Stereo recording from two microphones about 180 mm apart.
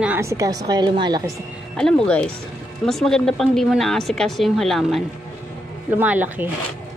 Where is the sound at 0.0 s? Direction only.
10° right (ahead or behind).